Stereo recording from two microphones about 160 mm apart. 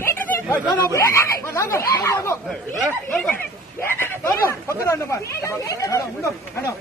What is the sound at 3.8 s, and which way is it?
Speech, 15° left (ahead or behind).